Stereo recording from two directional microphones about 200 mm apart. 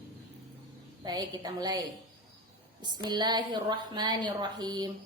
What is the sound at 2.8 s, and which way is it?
A woman's voice, 20° right (ahead or behind).